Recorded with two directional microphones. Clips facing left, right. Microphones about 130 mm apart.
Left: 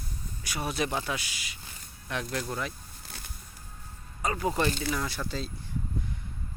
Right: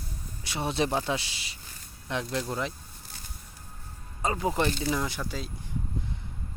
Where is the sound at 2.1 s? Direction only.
20° right (ahead or behind).